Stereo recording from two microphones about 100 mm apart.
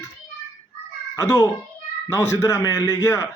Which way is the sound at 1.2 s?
30° left (ahead or behind).